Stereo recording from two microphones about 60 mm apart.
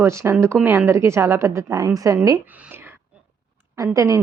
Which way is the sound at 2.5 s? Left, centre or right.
Right.